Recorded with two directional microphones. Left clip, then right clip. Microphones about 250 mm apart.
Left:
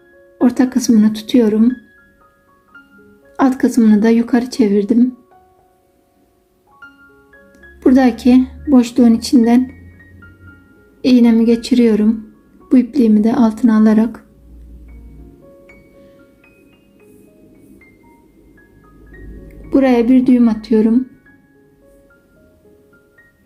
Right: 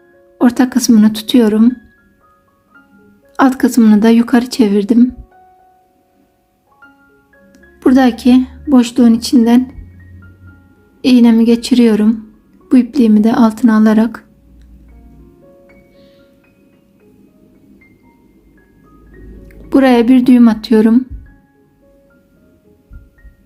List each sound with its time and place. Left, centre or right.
0.3 s speech: centre
3.3 s speech: centre
7.5 s speech: centre
11.0 s speech: centre
19.5 s speech: centre